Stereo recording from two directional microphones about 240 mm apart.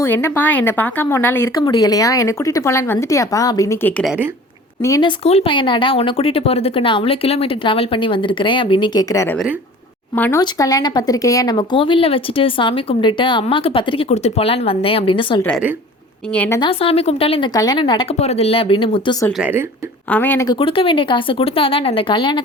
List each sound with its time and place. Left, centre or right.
0.0 s speech: centre
15.4 s speech: centre
16.6 s speech: left
19.4 s a woman's voice: centre
20.1 s speech: centre